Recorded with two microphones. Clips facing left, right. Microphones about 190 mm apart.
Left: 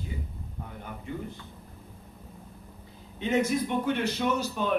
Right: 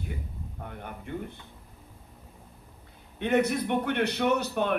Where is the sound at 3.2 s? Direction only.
65° right (ahead or behind).